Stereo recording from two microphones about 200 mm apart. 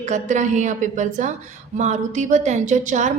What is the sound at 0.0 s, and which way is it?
A woman's voice, 35° right (ahead or behind).